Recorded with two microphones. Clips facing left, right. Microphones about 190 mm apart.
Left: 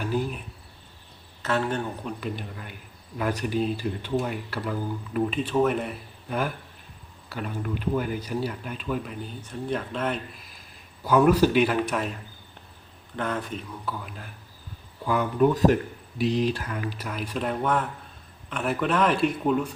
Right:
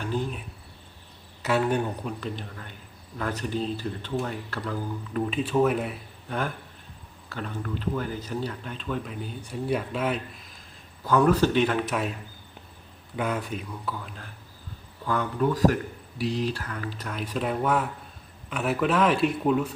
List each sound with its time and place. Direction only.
0.0 s a sound: 5° left (ahead or behind)
1.4 s speech: 10° right (ahead or behind)
2.0 s speech: 5° left (ahead or behind)
9.5 s speech: 10° right (ahead or behind)
13.1 s speech: 10° right (ahead or behind); by 15.4 s 10° left (ahead or behind)
15.4 s speech: 20° left (ahead or behind)
17.1 s speech: centre (ahead or behind)